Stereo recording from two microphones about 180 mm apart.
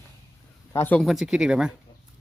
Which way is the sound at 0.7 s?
10° left (ahead or behind).